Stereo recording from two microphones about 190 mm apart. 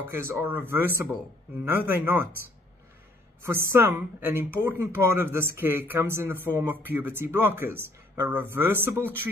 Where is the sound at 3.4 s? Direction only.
10° right (ahead or behind).